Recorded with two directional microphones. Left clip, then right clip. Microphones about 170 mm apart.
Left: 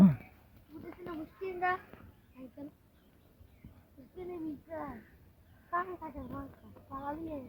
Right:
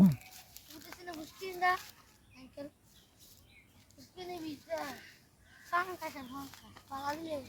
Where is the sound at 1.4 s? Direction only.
35° right (ahead or behind).